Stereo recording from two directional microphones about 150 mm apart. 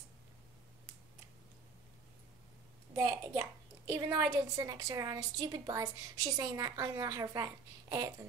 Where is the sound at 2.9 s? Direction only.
20° right (ahead or behind).